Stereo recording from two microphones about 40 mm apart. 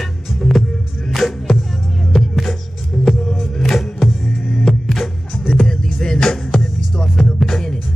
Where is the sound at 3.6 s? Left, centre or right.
Centre.